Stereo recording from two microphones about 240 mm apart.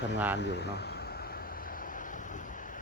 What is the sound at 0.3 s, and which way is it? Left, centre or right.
Vehicle, left.